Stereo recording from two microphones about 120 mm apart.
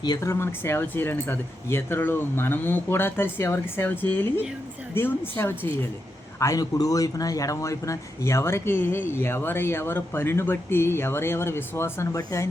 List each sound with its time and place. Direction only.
0.0 s a man's voice: 30° left (ahead or behind)
6.4 s a man's voice: 30° left (ahead or behind)